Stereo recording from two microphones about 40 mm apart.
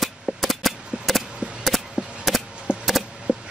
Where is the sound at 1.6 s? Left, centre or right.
Centre.